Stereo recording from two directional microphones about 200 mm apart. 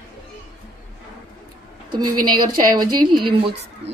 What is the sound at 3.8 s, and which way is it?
Speech, 60° right (ahead or behind).